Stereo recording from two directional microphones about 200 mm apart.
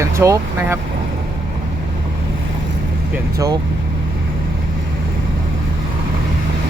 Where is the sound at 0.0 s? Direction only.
15° right (ahead or behind).